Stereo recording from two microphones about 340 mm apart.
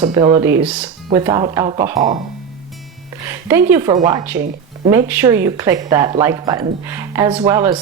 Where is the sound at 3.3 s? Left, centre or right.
Centre.